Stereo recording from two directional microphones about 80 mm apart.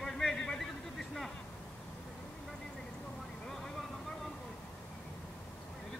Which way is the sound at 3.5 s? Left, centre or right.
Centre.